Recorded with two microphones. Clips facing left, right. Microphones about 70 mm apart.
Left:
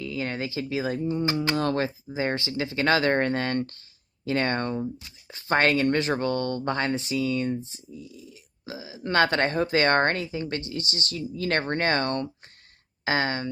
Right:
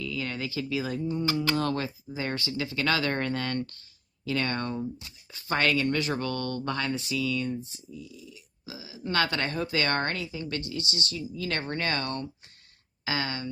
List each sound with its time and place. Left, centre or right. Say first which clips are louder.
0.0 s speech: left 3 dB; left
0.9 s speech: left 2 dB; left